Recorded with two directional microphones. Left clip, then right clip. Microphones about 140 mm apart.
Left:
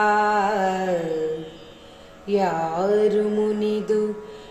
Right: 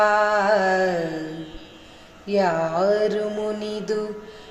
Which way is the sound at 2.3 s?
45° right (ahead or behind).